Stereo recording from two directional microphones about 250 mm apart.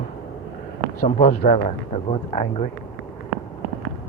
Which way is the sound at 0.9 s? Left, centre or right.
Left.